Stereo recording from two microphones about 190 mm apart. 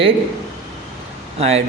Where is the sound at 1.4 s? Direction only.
35° right (ahead or behind).